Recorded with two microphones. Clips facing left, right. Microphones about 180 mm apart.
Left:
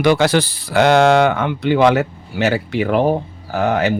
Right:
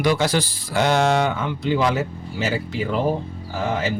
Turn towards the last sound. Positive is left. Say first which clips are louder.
# left 7 dB
turn(degrees=70)  # may be behind; listen again after turning